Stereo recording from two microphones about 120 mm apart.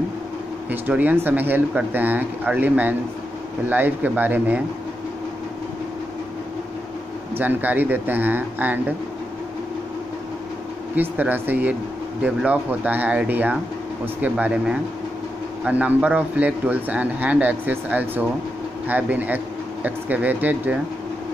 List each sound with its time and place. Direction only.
0.7 s speech: 15° right (ahead or behind)
7.3 s speech: 15° right (ahead or behind)
11.0 s speech: 15° right (ahead or behind)